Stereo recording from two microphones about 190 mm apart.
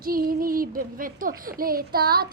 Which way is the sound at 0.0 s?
50° right (ahead or behind).